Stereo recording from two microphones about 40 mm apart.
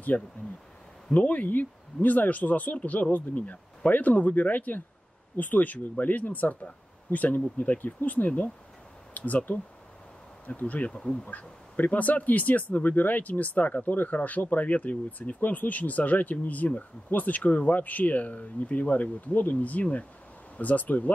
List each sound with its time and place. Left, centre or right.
0.1 s speech: left
10.4 s speech: left
11.0 s speech: centre
11.7 s speech: left